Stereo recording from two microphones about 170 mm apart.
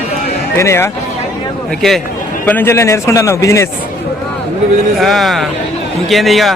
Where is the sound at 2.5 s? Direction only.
15° left (ahead or behind).